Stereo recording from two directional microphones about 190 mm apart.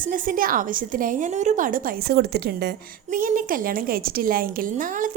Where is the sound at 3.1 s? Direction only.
45° right (ahead or behind).